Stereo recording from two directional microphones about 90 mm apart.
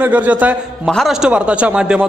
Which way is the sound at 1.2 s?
15° right (ahead or behind).